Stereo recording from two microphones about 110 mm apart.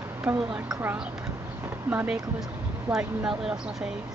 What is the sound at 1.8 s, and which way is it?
Speech, 20° right (ahead or behind).